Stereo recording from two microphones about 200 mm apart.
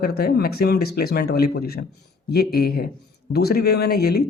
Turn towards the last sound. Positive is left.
turn(degrees=55)  # may be behind; listen again after turning